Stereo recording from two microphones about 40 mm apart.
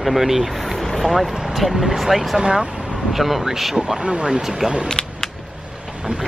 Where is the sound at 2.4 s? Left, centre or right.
Right.